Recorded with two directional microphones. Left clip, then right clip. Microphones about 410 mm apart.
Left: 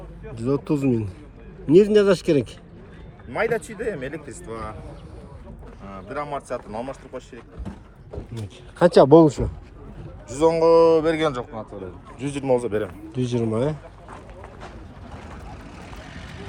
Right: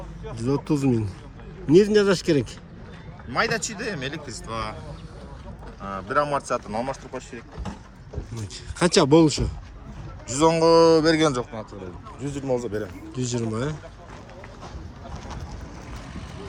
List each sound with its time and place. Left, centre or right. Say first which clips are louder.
0.3 s speech: left 1 dB; centre
3.3 s speech: left 1 dB; centre
5.8 s speech: right 7 dB; right
8.8 s speech: left 5 dB; centre
10.2 s speech: left 1 dB; centre
12.2 s a man's voice: left 5 dB; centre